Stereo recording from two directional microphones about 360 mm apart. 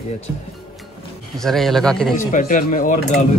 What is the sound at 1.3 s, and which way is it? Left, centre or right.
Speech, centre.